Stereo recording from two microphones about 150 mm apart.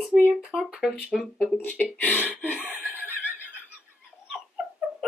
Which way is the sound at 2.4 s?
10° left (ahead or behind).